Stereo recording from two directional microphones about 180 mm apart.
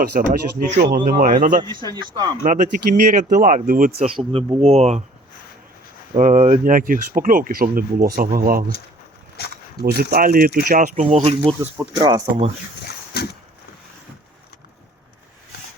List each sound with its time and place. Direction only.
0.0 s speech: 55° right (ahead or behind)
3.9 s speech: 30° right (ahead or behind)
6.1 s speech: 45° right (ahead or behind)
10.0 s speech: 55° right (ahead or behind); by 11.3 s 35° right (ahead or behind)
11.6 s speech: 15° right (ahead or behind)
13.1 s a sound: 60° left (ahead or behind)